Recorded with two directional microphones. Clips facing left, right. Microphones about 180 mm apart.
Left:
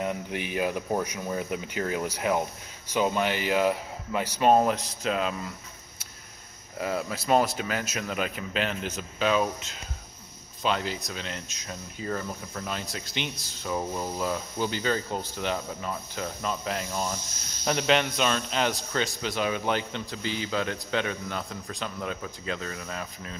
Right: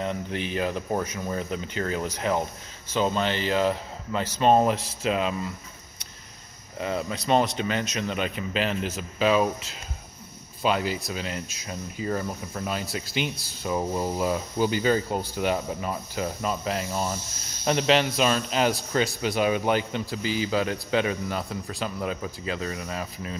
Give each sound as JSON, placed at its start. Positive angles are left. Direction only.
{"t": 0.0, "sound": "speech", "side_deg": 10}
{"t": 6.8, "sound": "speech", "side_deg": 5}
{"t": 13.6, "sound": "speech", "side_deg": -15}